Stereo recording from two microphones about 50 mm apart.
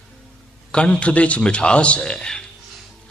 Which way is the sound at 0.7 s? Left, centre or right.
Centre.